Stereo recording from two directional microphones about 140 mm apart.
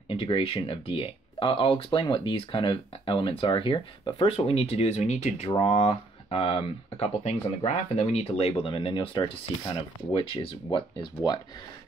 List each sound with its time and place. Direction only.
0.1 s speech: 40° left (ahead or behind)